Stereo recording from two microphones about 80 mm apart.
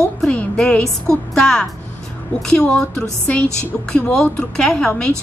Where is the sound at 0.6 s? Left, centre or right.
Centre.